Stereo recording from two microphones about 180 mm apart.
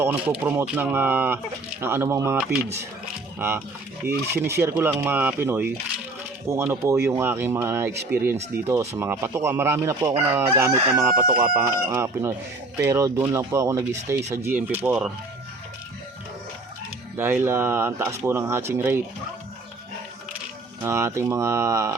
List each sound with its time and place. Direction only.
0.0 s chicken: 10° right (ahead or behind)
3.3 s speech: 15° right (ahead or behind)
4.0 s chicken: 10° right (ahead or behind)
17.2 s chicken: 10° right (ahead or behind)
20.8 s chicken: 15° right (ahead or behind)